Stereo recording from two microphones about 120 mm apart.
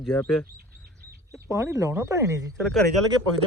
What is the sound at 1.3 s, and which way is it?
Speech, 25° right (ahead or behind).